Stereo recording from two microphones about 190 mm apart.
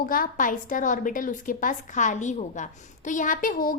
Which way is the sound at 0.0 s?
45° left (ahead or behind).